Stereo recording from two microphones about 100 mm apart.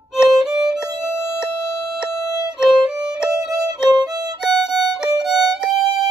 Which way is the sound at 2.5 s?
5° right (ahead or behind).